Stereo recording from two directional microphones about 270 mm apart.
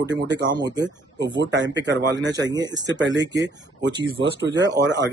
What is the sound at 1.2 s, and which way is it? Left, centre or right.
Speech, right.